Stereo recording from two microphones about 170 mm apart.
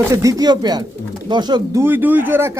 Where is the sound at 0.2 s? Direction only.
20° right (ahead or behind).